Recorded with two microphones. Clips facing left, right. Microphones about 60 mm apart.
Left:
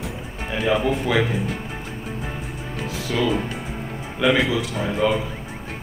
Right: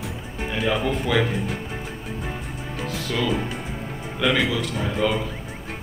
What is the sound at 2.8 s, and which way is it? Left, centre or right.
Music, centre.